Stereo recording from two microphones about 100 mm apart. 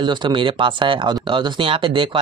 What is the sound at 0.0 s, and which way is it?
Speech, 50° right (ahead or behind).